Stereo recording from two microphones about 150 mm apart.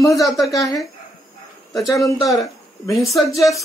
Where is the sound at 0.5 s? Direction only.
25° left (ahead or behind).